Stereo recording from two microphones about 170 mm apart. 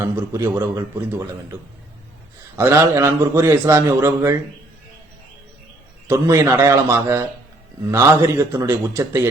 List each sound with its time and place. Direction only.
0.0 s a man's voice: 15° right (ahead or behind)
2.6 s a man's voice: 15° right (ahead or behind)
6.1 s a man's voice: 15° right (ahead or behind)